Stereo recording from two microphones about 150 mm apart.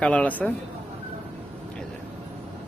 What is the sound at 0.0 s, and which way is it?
Speech, 10° left (ahead or behind).